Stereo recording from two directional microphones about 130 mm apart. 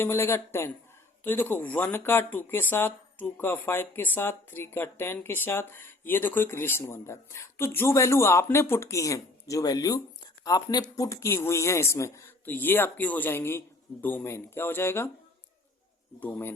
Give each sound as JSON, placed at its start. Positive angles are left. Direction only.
{"t": 0.0, "sound": "speech", "side_deg": 20}
{"t": 16.2, "sound": "speech", "side_deg": 15}